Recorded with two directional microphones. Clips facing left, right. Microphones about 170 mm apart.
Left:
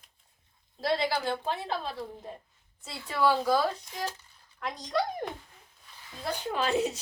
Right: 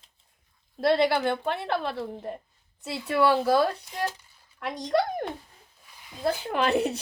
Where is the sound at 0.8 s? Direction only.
60° right (ahead or behind).